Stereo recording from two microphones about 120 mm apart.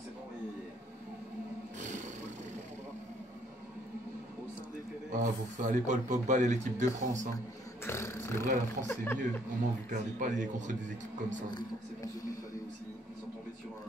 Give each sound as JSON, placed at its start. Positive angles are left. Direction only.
{"t": 5.1, "sound": "a man's voice", "side_deg": -90}
{"t": 7.8, "sound": "speech", "side_deg": 20}
{"t": 9.8, "sound": "a man's voice", "side_deg": -90}